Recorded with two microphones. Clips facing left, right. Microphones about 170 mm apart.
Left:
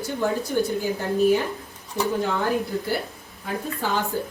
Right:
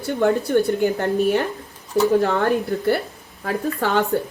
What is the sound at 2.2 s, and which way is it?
A woman's voice, 60° right (ahead or behind).